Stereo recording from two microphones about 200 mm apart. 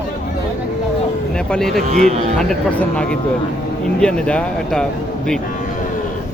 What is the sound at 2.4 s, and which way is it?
Speech, 5° left (ahead or behind).